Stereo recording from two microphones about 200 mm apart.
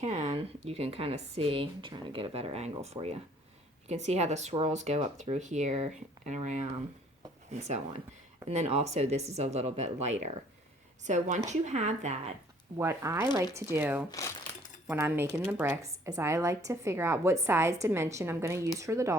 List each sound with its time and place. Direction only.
0.0 s speech: 35° right (ahead or behind)
8.4 s speech: 30° right (ahead or behind)
12.7 s a woman's voice: 15° right (ahead or behind)
14.1 s speech: 15° left (ahead or behind)
14.8 s a woman's voice: 10° right (ahead or behind)